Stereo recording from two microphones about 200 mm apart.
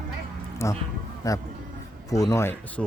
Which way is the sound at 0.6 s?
15° left (ahead or behind).